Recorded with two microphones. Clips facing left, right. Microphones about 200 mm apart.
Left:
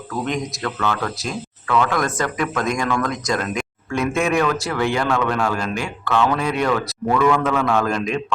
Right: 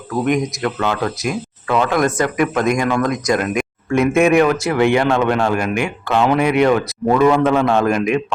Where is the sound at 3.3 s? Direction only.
15° right (ahead or behind).